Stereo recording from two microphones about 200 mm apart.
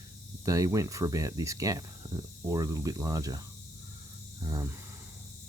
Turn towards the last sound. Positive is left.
turn(degrees=-15)  # may be behind; listen again after turning